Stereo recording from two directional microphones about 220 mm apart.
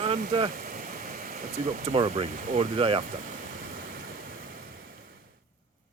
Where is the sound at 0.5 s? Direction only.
40° right (ahead or behind).